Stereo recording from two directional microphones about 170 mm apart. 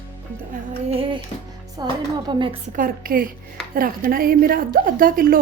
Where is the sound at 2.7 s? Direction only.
55° right (ahead or behind).